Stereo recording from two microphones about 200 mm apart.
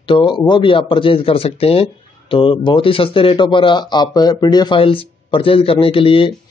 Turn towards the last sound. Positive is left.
turn(degrees=25)  # may be behind; listen again after turning